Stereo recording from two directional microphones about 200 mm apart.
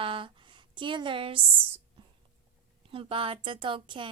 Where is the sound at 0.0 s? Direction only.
25° right (ahead or behind).